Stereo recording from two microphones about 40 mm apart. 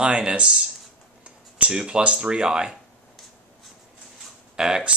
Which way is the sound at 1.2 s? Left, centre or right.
Right.